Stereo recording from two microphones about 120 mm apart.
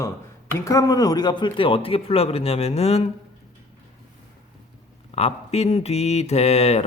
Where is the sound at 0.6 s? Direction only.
25° left (ahead or behind); by 3.1 s 60° left (ahead or behind).